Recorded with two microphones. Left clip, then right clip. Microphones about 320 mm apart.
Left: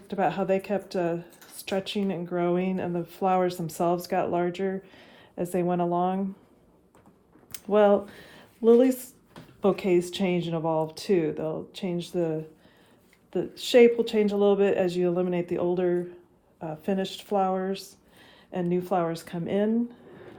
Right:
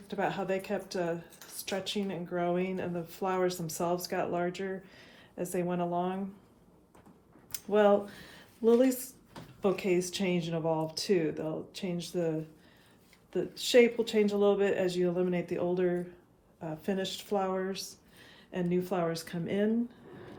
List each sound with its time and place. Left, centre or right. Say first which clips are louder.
0.1 s speech: left 7 dB; left
7.5 s speech: left 4 dB; left